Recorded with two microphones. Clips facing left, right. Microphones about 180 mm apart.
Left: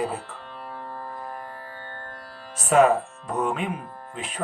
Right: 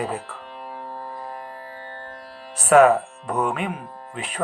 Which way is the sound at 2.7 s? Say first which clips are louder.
Right 4 dB; 65° right (ahead or behind).